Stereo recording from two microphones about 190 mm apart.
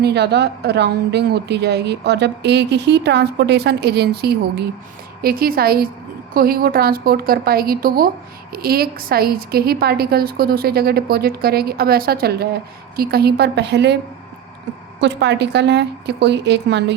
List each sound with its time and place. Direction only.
0.0 s a woman's voice: 60° right (ahead or behind)
15.0 s a woman's voice: 65° right (ahead or behind)